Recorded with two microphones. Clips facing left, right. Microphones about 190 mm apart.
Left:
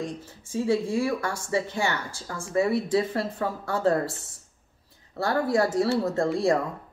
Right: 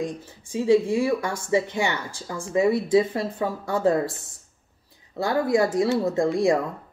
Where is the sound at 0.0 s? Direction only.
15° right (ahead or behind).